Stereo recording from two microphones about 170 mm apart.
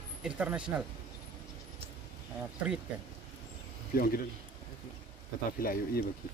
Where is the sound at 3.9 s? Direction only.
60° left (ahead or behind).